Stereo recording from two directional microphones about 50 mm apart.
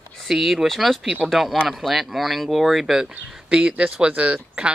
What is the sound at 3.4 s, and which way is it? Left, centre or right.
Speech, centre.